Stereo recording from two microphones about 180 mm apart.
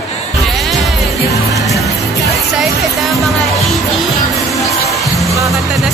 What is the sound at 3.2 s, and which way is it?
Music, centre (ahead or behind).